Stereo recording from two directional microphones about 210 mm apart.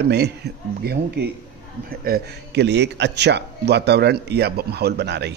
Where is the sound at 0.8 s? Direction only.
50° right (ahead or behind).